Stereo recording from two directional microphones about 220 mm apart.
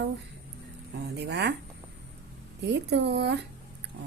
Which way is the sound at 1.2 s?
50° right (ahead or behind).